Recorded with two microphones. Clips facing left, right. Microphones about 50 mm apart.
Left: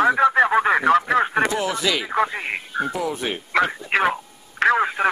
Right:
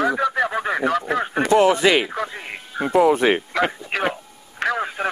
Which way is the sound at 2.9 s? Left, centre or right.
Right.